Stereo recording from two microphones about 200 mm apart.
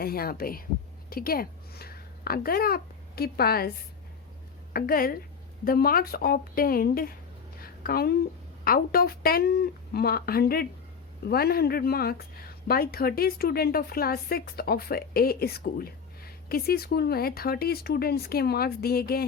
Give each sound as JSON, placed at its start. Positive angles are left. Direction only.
{"t": 0.0, "sound": "speech", "side_deg": 50}
{"t": 4.7, "sound": "a woman's voice", "side_deg": 45}